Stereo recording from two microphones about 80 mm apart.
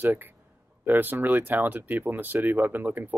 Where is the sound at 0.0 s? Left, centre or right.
Right.